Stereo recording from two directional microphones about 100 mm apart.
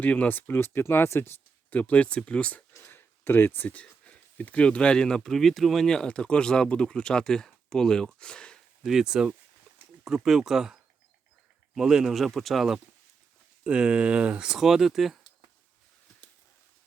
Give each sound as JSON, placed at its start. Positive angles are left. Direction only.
{"t": 0.0, "sound": "speech", "side_deg": 15}
{"t": 2.7, "sound": "speech", "side_deg": 25}
{"t": 8.8, "sound": "speech", "side_deg": -5}